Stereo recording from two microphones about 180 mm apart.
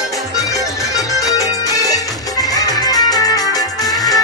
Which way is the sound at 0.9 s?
20° left (ahead or behind).